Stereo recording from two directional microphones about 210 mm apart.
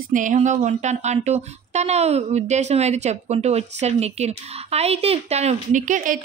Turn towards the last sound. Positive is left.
turn(degrees=-40)  # may be behind; listen again after turning